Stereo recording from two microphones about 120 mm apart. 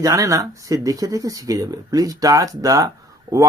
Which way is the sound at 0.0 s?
25° right (ahead or behind).